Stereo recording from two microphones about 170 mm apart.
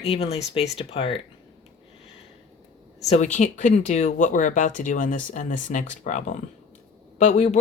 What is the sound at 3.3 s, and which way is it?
Speech, 50° left (ahead or behind).